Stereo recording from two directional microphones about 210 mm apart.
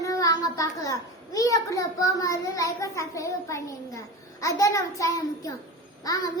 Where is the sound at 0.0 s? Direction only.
15° left (ahead or behind).